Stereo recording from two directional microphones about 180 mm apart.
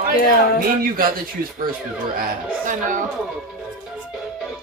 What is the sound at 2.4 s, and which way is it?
Speech, 45° right (ahead or behind).